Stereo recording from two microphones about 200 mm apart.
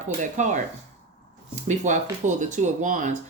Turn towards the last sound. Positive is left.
turn(degrees=-40)  # may be behind; listen again after turning